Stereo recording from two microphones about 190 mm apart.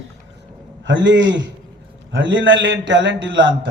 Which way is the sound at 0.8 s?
70° right (ahead or behind).